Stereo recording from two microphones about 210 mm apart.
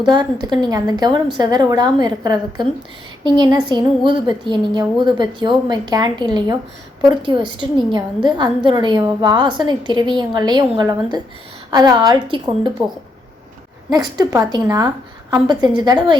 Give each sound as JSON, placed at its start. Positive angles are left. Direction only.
{"t": 0.0, "sound": "a woman's voice", "side_deg": -20}
{"t": 13.9, "sound": "a woman's voice", "side_deg": -20}